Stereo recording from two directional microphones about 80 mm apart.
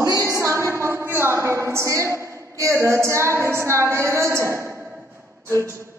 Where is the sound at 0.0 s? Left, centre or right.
Right.